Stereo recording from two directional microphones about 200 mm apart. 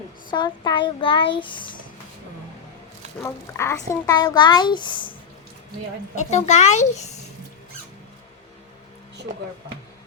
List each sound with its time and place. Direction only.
0.3 s a woman's voice: 20° left (ahead or behind)
3.2 s a woman's voice: 15° left (ahead or behind)
6.1 s a child's voice: 35° left (ahead or behind)